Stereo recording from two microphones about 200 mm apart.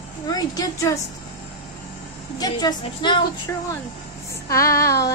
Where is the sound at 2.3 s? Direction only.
20° left (ahead or behind).